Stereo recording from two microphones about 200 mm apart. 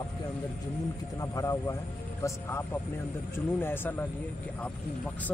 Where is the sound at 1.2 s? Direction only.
15° left (ahead or behind).